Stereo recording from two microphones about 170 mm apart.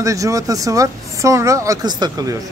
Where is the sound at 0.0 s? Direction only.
20° right (ahead or behind).